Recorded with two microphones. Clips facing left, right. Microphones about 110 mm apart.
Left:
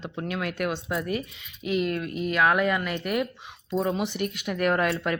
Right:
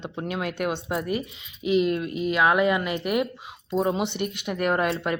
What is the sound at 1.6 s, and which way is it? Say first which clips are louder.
Speech: right 4 dB; 20° right (ahead or behind).